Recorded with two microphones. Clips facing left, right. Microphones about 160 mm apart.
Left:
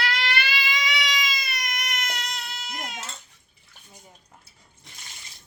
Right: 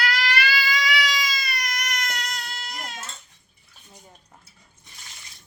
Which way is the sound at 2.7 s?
20° left (ahead or behind).